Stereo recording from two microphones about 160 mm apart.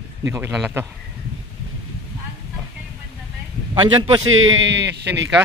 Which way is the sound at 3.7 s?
30° right (ahead or behind).